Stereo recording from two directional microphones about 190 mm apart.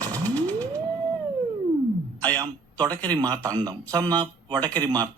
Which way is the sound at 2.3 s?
20° right (ahead or behind).